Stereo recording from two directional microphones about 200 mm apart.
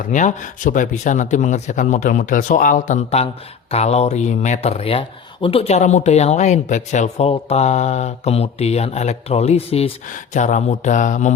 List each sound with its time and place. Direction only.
0.1 s speech: 40° left (ahead or behind)